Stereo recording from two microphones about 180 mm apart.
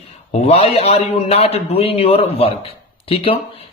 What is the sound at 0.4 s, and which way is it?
Speech, 35° left (ahead or behind).